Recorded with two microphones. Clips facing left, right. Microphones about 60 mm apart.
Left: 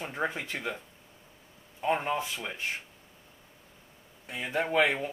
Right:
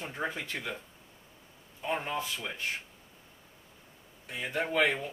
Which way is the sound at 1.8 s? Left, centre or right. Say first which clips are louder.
Left 4 dB; centre.